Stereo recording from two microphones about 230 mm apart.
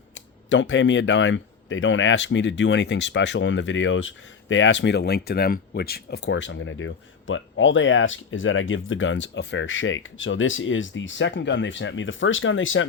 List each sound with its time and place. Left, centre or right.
0.1 s speech: left